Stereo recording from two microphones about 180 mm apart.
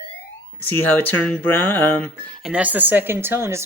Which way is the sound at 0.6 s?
10° left (ahead or behind).